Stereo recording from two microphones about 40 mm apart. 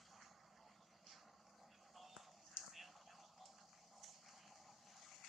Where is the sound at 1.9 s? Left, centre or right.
Centre.